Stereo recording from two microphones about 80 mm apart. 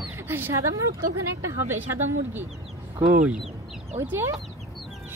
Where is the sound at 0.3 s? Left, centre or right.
Right.